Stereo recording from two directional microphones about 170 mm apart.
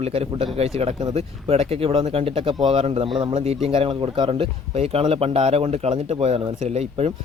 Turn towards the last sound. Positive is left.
turn(degrees=-35)  # may be behind; listen again after turning